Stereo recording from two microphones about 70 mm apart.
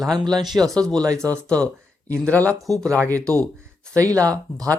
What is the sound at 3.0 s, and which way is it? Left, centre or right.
Speech, right.